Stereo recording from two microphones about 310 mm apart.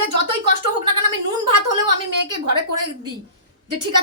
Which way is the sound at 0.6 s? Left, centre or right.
Right.